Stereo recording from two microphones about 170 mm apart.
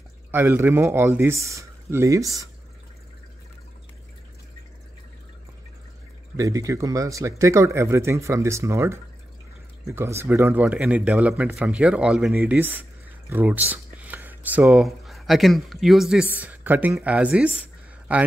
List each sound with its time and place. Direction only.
0.3 s speech: 15° right (ahead or behind)
6.3 s speech: 20° right (ahead or behind)